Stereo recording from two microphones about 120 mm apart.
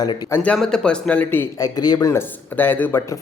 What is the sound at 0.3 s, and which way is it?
Speech, 20° left (ahead or behind).